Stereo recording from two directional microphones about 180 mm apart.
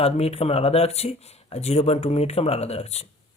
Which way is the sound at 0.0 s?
35° left (ahead or behind).